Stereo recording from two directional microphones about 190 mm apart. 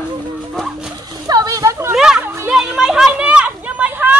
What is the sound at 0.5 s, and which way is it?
Music, centre (ahead or behind).